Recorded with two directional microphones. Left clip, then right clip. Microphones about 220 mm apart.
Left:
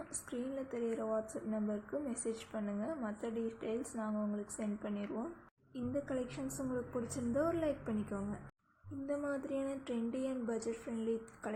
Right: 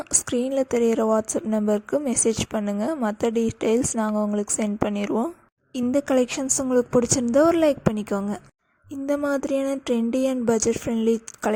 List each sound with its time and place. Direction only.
0.3 s speech: 50° right (ahead or behind)